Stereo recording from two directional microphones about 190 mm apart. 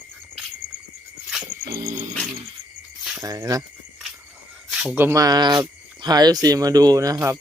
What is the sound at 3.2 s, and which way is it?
Speech, 20° right (ahead or behind).